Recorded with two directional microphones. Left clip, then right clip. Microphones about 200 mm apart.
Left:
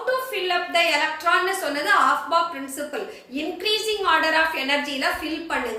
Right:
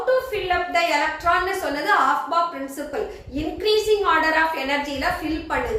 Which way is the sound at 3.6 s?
15° left (ahead or behind).